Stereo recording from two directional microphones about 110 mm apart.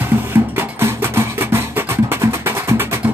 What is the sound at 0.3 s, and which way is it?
Music, 20° right (ahead or behind).